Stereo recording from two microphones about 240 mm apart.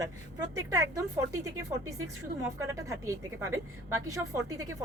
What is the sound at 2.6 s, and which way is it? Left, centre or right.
A woman's voice, centre.